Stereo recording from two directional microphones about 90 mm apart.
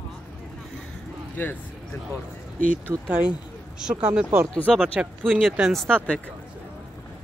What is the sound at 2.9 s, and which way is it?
Speech, 25° right (ahead or behind).